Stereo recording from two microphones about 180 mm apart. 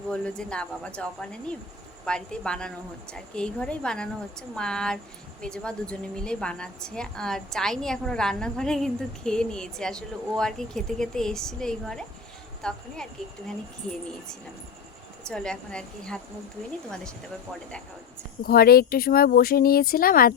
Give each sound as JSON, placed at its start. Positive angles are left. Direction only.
{"t": 0.1, "sound": "speech", "side_deg": 5}
{"t": 15.2, "sound": "speech", "side_deg": 5}
{"t": 18.4, "sound": "speech", "side_deg": 60}